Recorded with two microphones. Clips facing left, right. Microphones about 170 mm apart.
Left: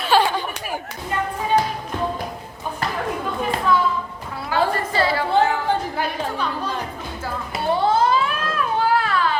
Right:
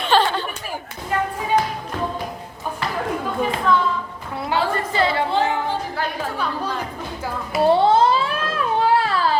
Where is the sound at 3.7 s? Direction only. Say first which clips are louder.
Even; 5° left (ahead or behind).